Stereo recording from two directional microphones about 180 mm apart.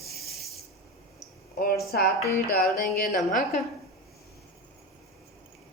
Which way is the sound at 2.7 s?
45° left (ahead or behind).